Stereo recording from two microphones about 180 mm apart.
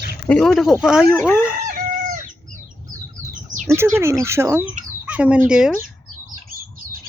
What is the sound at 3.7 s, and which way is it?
Speech, 15° right (ahead or behind).